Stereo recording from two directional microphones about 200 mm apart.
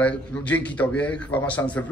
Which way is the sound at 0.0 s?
5° left (ahead or behind).